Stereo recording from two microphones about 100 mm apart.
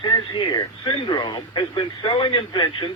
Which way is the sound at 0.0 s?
50° left (ahead or behind).